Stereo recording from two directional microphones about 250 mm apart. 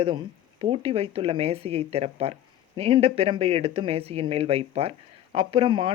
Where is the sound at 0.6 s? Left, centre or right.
Right.